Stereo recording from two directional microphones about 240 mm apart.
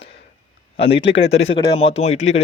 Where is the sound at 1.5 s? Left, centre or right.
Left.